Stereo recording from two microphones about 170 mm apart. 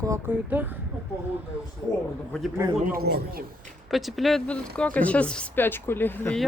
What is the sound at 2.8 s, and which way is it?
Speech, 60° right (ahead or behind).